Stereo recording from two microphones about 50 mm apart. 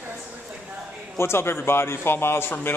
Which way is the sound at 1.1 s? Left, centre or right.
Left.